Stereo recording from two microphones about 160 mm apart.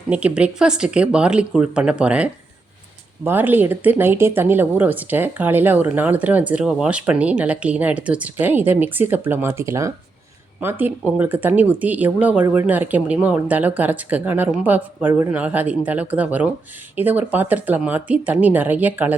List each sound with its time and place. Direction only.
0.1 s speech: 10° right (ahead or behind)